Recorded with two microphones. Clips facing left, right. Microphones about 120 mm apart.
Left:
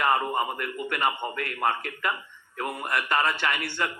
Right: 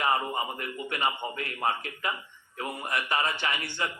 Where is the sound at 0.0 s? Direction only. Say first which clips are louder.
Left 3 dB; 50° left (ahead or behind).